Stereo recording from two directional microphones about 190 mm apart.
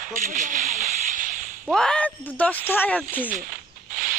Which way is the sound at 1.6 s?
5° left (ahead or behind).